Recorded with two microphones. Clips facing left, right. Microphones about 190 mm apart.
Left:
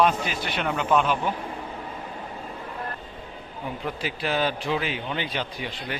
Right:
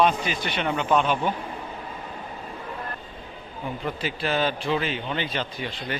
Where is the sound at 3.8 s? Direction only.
10° left (ahead or behind).